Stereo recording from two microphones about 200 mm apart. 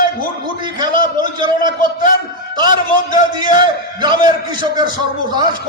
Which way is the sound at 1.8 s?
45° left (ahead or behind).